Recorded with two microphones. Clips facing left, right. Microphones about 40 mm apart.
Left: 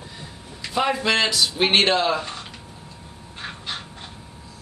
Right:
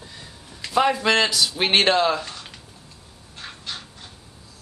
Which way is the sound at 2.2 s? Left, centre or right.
Centre.